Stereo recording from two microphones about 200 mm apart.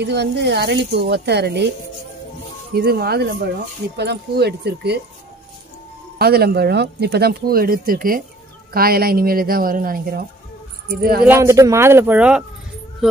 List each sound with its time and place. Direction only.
0.0 s speech: 60° right (ahead or behind)
2.7 s speech: 50° right (ahead or behind)
6.1 s speech: 50° right (ahead or behind)
11.2 s speech: 15° right (ahead or behind)